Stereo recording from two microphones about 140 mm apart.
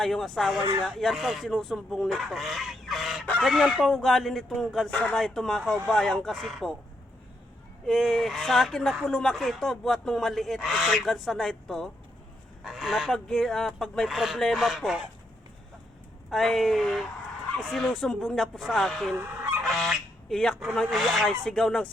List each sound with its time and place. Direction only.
0.0 s speech: centre (ahead or behind)
7.9 s speech: centre (ahead or behind)
16.3 s speech: centre (ahead or behind)
19.1 s goose: 15° right (ahead or behind)
19.6 s speech: centre (ahead or behind)